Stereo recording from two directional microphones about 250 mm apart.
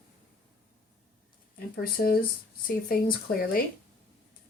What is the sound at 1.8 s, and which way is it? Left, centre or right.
Speech, left.